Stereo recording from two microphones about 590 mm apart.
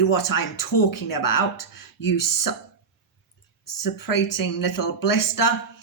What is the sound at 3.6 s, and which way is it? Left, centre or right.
Speech, left.